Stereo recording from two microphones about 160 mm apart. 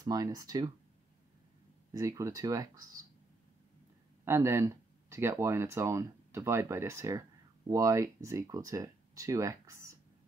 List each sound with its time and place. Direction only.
0.0 s speech: 20° right (ahead or behind)
2.0 s speech: 20° right (ahead or behind)
4.2 s speech: 15° right (ahead or behind)